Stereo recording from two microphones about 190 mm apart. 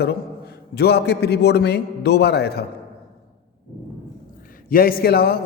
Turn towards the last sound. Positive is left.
turn(degrees=55)  # may be behind; listen again after turning